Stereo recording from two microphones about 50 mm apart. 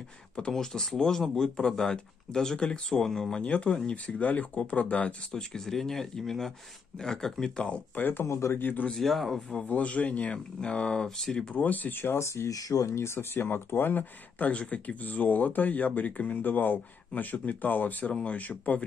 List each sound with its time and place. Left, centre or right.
0.4 s speech: centre
3.4 s speech: left
5.3 s speech: centre
7.9 s speech: left
8.9 s speech: centre
9.7 s speech: left
11.1 s speech: centre
11.5 s speech: left
12.2 s speech: left